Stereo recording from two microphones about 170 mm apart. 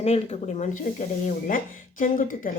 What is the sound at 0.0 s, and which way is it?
Speech, 40° left (ahead or behind).